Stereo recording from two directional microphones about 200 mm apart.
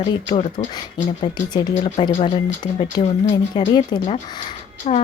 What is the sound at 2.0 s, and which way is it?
Speech, 25° left (ahead or behind).